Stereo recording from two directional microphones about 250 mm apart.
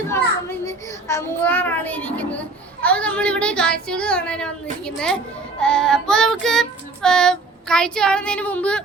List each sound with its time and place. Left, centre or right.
0.6 s child singing: centre